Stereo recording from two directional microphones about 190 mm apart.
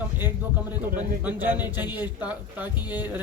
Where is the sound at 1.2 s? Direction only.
10° right (ahead or behind).